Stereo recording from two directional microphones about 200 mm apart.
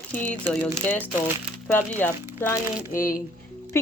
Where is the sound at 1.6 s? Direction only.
10° left (ahead or behind).